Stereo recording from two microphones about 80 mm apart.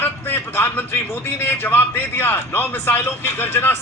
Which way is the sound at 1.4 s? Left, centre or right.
Left.